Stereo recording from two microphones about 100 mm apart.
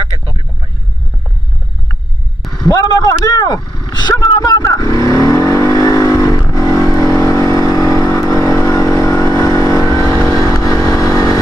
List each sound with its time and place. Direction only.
2.7 s vehicle: 40° left (ahead or behind)